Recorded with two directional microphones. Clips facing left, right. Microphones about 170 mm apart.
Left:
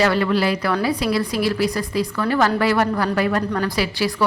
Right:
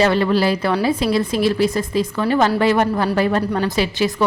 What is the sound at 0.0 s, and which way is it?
A woman's voice, 25° right (ahead or behind).